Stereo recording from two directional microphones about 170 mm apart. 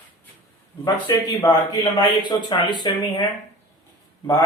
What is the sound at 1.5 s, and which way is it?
Speech, 25° left (ahead or behind).